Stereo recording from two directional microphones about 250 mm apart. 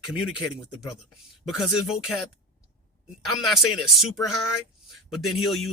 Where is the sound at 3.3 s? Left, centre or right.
Centre.